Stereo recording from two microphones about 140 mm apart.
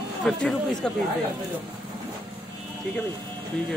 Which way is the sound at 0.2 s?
Centre (ahead or behind).